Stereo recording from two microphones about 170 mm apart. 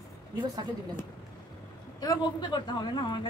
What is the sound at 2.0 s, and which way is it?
A man's voice, 25° left (ahead or behind).